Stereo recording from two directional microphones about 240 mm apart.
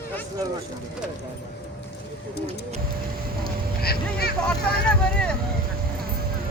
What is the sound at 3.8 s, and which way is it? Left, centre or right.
Vehicle, left.